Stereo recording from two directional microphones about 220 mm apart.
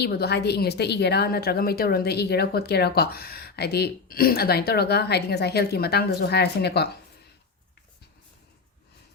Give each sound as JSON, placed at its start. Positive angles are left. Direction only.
{"t": 0.0, "sound": "a woman's voice", "side_deg": 45}